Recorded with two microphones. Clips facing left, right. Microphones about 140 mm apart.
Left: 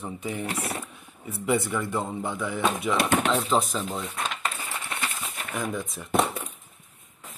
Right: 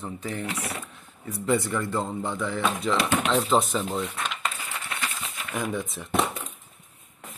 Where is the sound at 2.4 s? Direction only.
20° left (ahead or behind).